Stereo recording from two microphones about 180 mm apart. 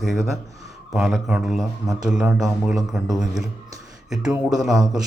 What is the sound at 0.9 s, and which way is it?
A man's voice, 5° right (ahead or behind).